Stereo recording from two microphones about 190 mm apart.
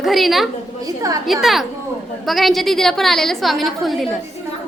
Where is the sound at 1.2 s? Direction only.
Centre (ahead or behind).